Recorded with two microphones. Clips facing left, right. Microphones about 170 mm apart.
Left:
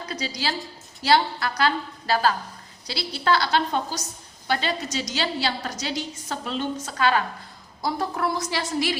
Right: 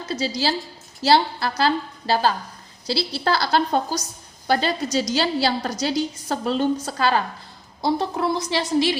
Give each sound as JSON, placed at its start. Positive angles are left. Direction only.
{"t": 0.0, "sound": "a woman's voice", "side_deg": -30}